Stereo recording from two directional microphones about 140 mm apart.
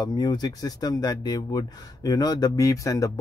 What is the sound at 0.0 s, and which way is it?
Speech, 30° left (ahead or behind).